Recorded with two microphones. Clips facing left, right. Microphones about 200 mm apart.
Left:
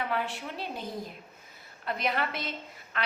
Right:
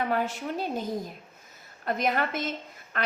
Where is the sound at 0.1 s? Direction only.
45° right (ahead or behind).